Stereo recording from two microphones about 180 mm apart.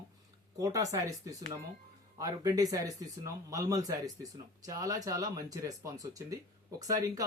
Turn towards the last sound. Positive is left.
turn(degrees=-20)  # may be behind; listen again after turning